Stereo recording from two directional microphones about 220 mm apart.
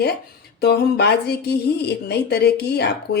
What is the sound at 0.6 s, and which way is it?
Speech, 45° left (ahead or behind).